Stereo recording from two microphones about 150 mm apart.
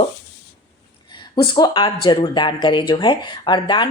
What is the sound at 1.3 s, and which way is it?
Speech, 30° left (ahead or behind).